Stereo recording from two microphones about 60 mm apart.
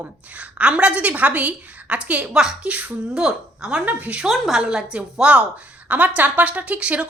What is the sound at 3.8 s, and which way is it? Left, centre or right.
Speech, right.